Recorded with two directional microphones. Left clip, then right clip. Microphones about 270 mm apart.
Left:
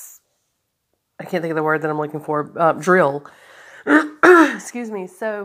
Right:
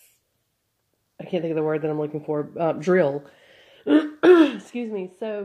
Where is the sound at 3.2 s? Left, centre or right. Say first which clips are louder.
Left 7 dB; centre.